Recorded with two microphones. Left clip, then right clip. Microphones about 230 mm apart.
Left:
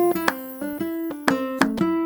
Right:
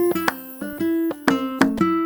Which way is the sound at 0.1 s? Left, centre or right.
Centre.